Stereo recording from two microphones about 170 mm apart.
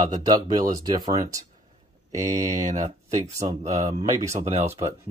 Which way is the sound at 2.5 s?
40° right (ahead or behind).